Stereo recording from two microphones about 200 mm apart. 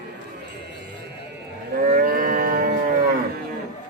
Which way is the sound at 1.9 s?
45° right (ahead or behind).